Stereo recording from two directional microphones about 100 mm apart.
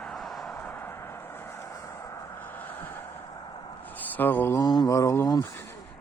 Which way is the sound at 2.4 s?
20° left (ahead or behind).